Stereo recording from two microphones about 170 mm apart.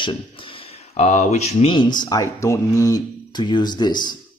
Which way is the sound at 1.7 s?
25° left (ahead or behind).